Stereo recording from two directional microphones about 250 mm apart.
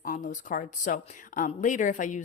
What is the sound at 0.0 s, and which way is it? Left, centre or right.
Speech, left.